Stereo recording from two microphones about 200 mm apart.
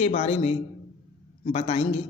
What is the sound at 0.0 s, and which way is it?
A man's voice, 35° left (ahead or behind).